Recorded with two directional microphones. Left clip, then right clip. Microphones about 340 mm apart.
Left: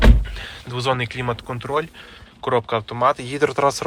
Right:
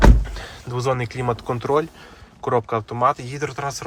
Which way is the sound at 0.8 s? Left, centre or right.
Centre.